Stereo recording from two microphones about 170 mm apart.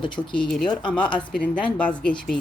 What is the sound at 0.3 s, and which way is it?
A woman's voice, 5° left (ahead or behind).